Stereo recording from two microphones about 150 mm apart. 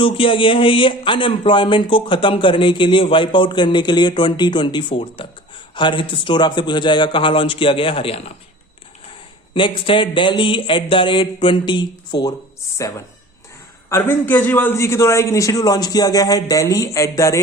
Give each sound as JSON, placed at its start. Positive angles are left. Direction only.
{"t": 0.0, "sound": "speech", "side_deg": 35}
{"t": 9.6, "sound": "speech", "side_deg": 35}
{"t": 13.9, "sound": "a man's voice", "side_deg": 15}